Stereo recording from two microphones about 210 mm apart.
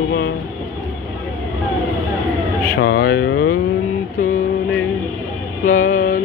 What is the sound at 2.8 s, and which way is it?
Speech, 45° left (ahead or behind).